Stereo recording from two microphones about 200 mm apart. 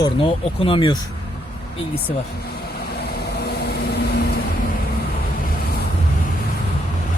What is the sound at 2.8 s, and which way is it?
Vehicle, 55° left (ahead or behind).